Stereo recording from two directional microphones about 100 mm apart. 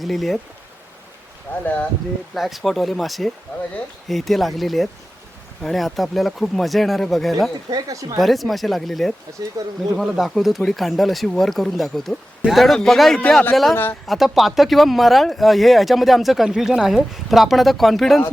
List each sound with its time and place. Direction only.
0.0 s speech: centre (ahead or behind)
1.5 s speech: 20° left (ahead or behind)
2.3 s speech: centre (ahead or behind)
7.7 s speech: 35° right (ahead or behind)
8.2 s speech: centre (ahead or behind)
9.6 s speech: 40° right (ahead or behind)
9.9 s speech: 5° right (ahead or behind)
14.1 s speech: centre (ahead or behind)